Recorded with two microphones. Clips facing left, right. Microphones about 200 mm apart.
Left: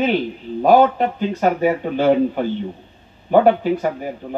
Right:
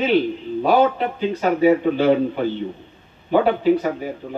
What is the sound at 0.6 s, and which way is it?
A man's voice, 45° left (ahead or behind).